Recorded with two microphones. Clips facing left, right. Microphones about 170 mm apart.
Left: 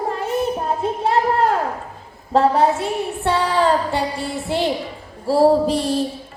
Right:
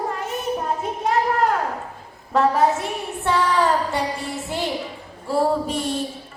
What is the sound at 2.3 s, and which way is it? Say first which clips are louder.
A woman's voice: left 3 dB; 35° left (ahead or behind).